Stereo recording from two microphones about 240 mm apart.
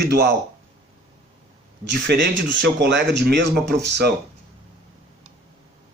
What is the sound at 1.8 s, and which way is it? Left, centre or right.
Speech, right.